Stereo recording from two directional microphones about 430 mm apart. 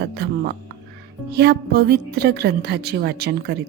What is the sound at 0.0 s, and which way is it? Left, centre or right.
Music, right.